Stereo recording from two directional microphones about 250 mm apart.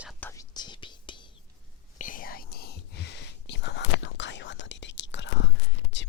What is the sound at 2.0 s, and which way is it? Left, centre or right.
Whispering, left.